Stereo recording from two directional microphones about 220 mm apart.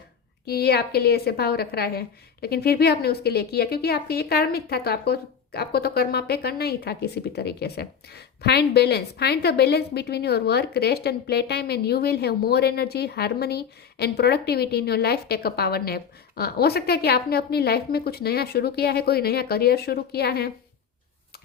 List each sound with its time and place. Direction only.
0.4 s a woman's voice: 45° left (ahead or behind)